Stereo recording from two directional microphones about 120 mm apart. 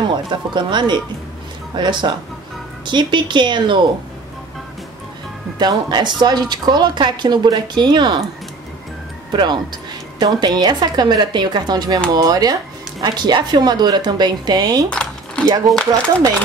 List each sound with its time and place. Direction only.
0.1 s a woman's voice: 40° right (ahead or behind)
5.6 s a woman's voice: 35° right (ahead or behind)
9.3 s a woman's voice: 35° right (ahead or behind)
14.9 s typing: 10° left (ahead or behind)
15.4 s a woman's voice: 30° right (ahead or behind)